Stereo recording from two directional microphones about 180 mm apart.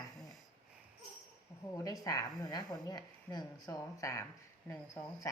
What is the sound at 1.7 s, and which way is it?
Speech, 20° left (ahead or behind).